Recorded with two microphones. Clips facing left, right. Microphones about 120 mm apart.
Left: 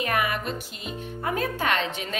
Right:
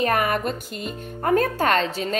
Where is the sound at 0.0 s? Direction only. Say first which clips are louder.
Right 5 dB; 40° right (ahead or behind).